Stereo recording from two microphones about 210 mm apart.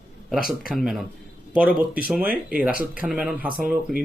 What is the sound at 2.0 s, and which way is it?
Speech, 5° right (ahead or behind).